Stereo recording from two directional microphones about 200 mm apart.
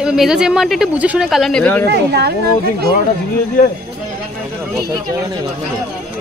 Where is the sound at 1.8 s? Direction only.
55° right (ahead or behind).